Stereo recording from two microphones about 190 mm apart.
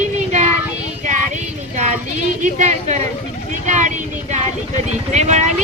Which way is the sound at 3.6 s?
40° right (ahead or behind).